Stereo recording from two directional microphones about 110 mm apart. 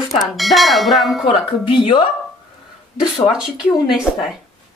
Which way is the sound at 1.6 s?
50° left (ahead or behind).